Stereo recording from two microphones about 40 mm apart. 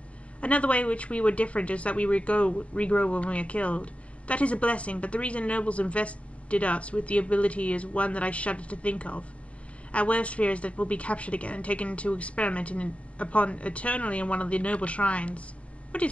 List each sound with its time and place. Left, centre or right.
0.4 s speech: left